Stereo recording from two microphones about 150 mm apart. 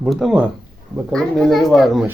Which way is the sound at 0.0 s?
Centre (ahead or behind).